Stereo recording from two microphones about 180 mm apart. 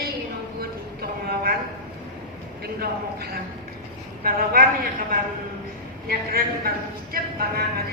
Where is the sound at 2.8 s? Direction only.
55° right (ahead or behind).